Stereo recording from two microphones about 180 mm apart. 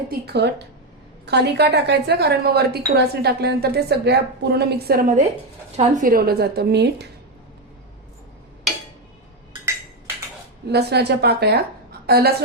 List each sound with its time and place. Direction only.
0.1 s a woman's voice: 65° right (ahead or behind)
10.7 s a woman's voice: 65° right (ahead or behind)